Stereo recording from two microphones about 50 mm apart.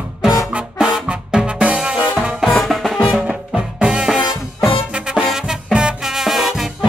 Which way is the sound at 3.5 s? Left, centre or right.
Centre.